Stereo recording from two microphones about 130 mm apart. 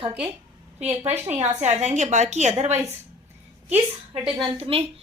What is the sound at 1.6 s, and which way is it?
A woman's voice, 65° right (ahead or behind).